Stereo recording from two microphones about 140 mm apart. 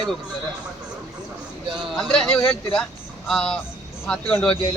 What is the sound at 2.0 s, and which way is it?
Speech, 5° left (ahead or behind).